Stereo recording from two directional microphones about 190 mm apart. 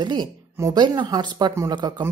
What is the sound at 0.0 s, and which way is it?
Speech, 25° right (ahead or behind).